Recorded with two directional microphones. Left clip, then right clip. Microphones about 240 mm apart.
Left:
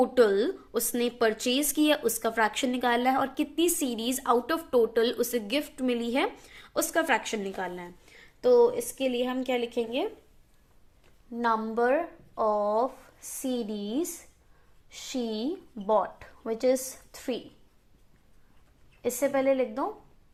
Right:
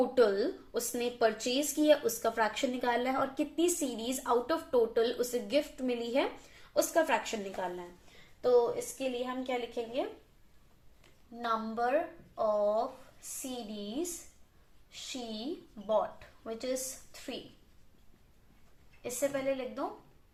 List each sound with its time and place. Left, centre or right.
0.0 s a woman's voice: left
8.4 s a woman's voice: left
11.3 s a woman's voice: left
19.0 s a woman's voice: left